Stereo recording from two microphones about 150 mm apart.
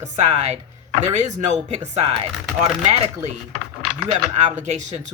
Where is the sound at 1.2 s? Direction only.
50° right (ahead or behind).